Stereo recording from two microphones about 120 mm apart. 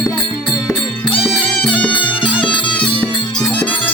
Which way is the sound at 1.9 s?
45° left (ahead or behind).